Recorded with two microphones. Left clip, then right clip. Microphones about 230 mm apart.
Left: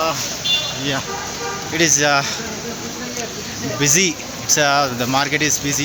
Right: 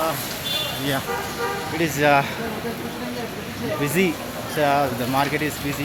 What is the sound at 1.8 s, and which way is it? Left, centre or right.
Speech, left.